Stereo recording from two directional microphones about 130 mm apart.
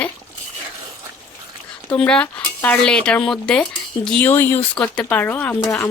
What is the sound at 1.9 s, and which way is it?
Speech, 10° left (ahead or behind).